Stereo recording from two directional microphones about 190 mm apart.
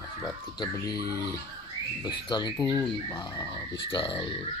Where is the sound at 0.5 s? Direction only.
20° left (ahead or behind).